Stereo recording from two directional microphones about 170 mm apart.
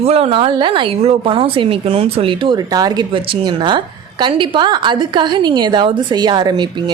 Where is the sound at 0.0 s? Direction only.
35° right (ahead or behind).